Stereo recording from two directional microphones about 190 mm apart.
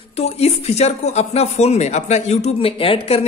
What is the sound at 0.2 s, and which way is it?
Speech, 35° left (ahead or behind).